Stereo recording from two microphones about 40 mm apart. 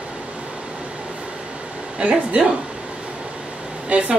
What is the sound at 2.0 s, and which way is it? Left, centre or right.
Speech, right.